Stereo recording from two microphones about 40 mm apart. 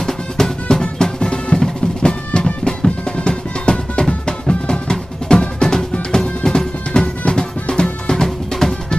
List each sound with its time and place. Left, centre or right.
0.0 s drum: centre
3.2 s music: left
4.3 s drum: left
6.4 s music: centre